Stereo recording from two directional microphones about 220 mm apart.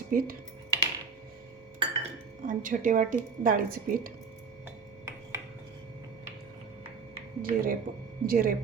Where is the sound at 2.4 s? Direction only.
40° right (ahead or behind).